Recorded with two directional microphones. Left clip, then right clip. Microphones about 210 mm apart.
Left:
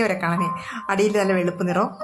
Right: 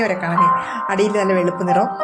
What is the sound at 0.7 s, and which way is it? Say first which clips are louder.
Speech: right 3 dB; centre (ahead or behind).